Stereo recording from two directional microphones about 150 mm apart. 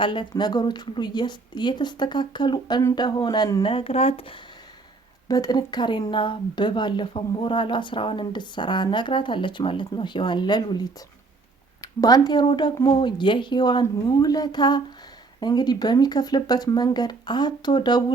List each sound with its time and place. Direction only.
0.0 s a woman's voice: 35° left (ahead or behind)
5.3 s a woman's voice: 25° left (ahead or behind)